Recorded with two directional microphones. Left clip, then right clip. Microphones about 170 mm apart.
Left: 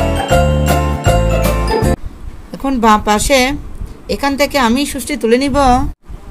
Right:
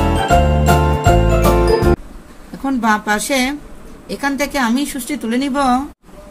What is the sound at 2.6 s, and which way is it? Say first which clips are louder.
Speech: left 5 dB; 50° left (ahead or behind).